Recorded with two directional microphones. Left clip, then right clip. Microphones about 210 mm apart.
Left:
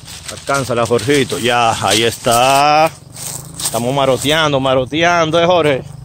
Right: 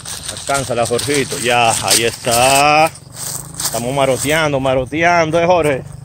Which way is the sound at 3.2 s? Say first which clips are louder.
Right 1 dB; 5° left (ahead or behind).